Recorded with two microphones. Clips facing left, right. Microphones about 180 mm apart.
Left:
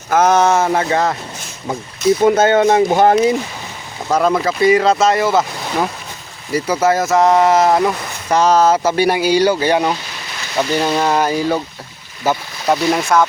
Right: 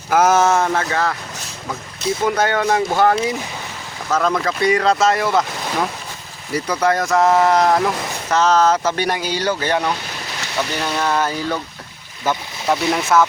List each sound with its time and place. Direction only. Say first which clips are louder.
0.1 s speech: left 2 dB; 5° right (ahead or behind)
0.7 s speech: left 4 dB; 20° left (ahead or behind)
2.2 s speech: left 6 dB; 25° left (ahead or behind)
4.1 s speech: left 4 dB; 10° left (ahead or behind)